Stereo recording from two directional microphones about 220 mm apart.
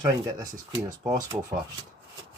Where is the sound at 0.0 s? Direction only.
15° right (ahead or behind).